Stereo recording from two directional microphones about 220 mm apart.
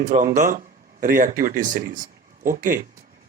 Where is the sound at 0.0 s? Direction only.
35° right (ahead or behind).